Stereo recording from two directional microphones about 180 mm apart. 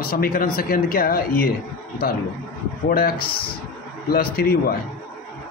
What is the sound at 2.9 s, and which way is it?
A man's voice, 55° left (ahead or behind).